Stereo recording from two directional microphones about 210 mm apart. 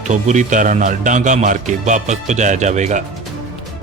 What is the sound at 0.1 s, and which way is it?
A man's voice, 35° right (ahead or behind).